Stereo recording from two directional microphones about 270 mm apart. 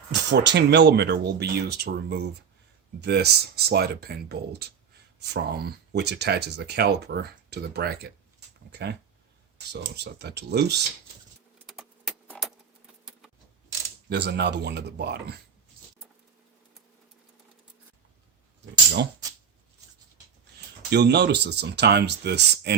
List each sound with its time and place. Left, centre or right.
0.1 s speech: right
11.6 s keys jangling: centre
14.1 s speech: right
20.9 s speech: right